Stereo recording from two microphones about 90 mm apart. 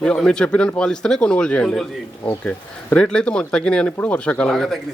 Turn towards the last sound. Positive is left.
turn(degrees=5)  # may be behind; listen again after turning